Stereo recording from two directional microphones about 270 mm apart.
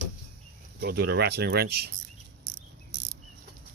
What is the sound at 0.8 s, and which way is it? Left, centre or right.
Speech, right.